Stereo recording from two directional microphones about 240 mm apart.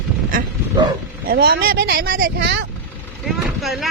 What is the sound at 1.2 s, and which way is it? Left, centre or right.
Speech, right.